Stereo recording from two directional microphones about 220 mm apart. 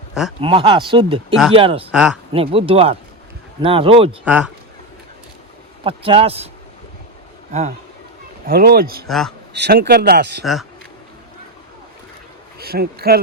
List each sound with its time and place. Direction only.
0.1 s speech: centre (ahead or behind)
0.4 s speech: 20° right (ahead or behind)
1.9 s a man's voice: 5° right (ahead or behind)
2.3 s speech: 25° right (ahead or behind)
4.3 s speech: 5° right (ahead or behind)
5.8 s speech: 25° right (ahead or behind)
8.4 s speech: 45° right (ahead or behind)
9.0 s a man's voice: centre (ahead or behind)
9.5 s speech: 50° right (ahead or behind)
10.4 s a man's voice: centre (ahead or behind)
12.5 s a man's voice: 45° right (ahead or behind)